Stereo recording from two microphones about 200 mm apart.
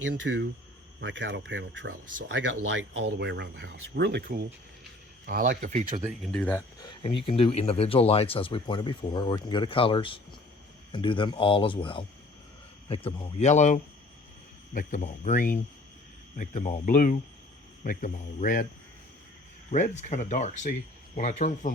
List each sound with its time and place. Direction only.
0.3 s speech: 65° right (ahead or behind)
3.2 s speech: 60° right (ahead or behind)
5.2 s speech: 45° right (ahead or behind)
6.1 s speech: centre (ahead or behind)
6.7 s speech: 25° left (ahead or behind); by 18.6 s 40° left (ahead or behind)
19.7 s speech: 35° left (ahead or behind)